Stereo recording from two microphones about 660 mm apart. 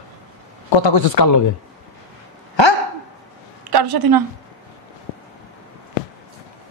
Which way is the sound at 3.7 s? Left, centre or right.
Right.